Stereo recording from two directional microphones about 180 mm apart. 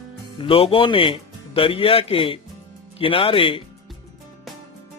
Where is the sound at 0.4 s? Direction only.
30° left (ahead or behind).